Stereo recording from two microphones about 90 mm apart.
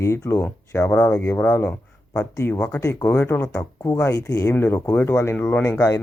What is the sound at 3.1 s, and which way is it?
Speech, 25° left (ahead or behind).